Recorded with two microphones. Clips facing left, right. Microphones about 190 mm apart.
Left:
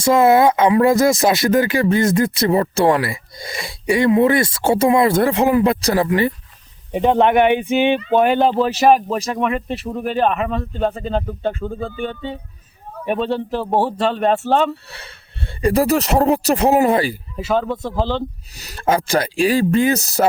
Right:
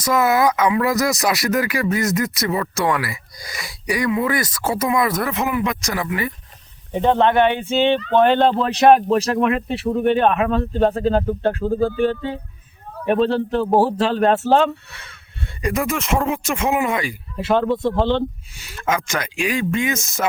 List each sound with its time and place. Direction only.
0.0 s speech: 30° left (ahead or behind)
6.9 s speech: 15° left (ahead or behind)
14.8 s speech: 35° left (ahead or behind)
17.3 s speech: centre (ahead or behind)
18.5 s speech: 40° left (ahead or behind)